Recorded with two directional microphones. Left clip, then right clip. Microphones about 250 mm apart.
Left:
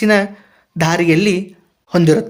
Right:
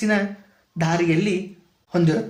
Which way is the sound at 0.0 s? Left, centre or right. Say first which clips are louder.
Left 9 dB; left.